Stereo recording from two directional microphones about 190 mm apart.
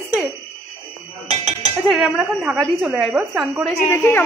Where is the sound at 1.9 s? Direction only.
Centre (ahead or behind).